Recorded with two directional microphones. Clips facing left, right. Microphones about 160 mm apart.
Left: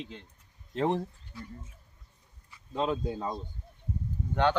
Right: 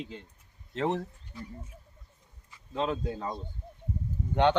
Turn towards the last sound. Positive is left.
turn(degrees=-20)  # may be behind; listen again after turning